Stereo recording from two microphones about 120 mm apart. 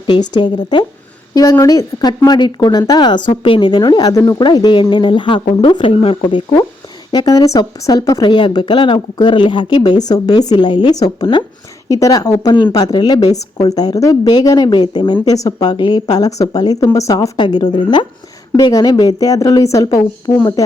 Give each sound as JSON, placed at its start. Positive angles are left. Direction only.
{"t": 0.1, "sound": "a woman's voice", "side_deg": 40}
{"t": 3.4, "sound": "a woman's voice", "side_deg": 45}
{"t": 7.1, "sound": "a woman's voice", "side_deg": 35}
{"t": 11.9, "sound": "a woman's voice", "side_deg": 30}